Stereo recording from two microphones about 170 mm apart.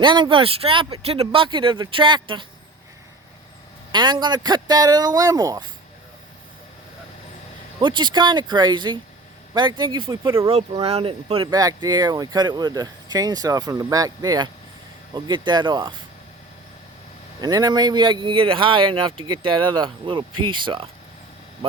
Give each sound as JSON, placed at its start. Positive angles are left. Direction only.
{"t": 0.0, "sound": "speech", "side_deg": -30}
{"t": 3.9, "sound": "speech", "side_deg": -25}
{"t": 7.8, "sound": "speech", "side_deg": -25}
{"t": 10.8, "sound": "speech", "side_deg": -35}
{"t": 11.5, "sound": "speech", "side_deg": -25}
{"t": 17.4, "sound": "speech", "side_deg": -25}